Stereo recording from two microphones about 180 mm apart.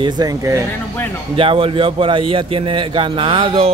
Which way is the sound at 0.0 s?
20° right (ahead or behind).